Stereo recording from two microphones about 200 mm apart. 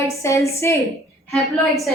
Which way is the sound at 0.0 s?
15° left (ahead or behind).